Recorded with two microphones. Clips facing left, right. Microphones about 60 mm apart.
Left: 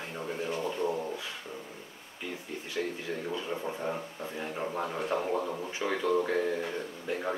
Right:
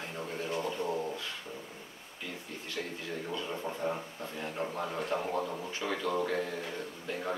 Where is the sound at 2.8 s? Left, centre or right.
Centre.